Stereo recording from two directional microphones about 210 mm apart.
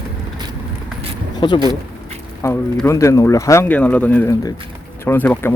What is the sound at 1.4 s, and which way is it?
Speech, 25° left (ahead or behind).